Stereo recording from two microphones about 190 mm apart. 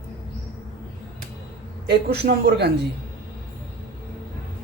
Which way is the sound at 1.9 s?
60° right (ahead or behind).